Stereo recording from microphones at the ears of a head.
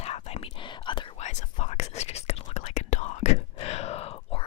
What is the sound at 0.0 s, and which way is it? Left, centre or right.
Whispering, left.